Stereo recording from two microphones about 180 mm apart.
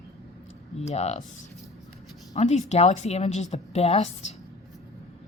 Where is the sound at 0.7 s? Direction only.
35° left (ahead or behind).